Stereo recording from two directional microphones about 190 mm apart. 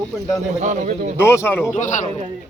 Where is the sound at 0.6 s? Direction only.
40° right (ahead or behind).